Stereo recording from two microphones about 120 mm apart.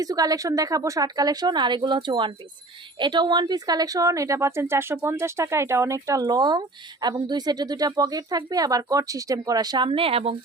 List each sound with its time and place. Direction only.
0.0 s speech: 30° right (ahead or behind); by 10.3 s 55° right (ahead or behind)